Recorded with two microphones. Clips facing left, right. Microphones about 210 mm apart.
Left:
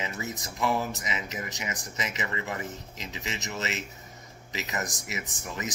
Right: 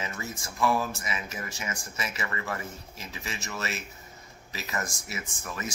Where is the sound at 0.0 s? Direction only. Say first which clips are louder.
Left 2 dB; 20° left (ahead or behind).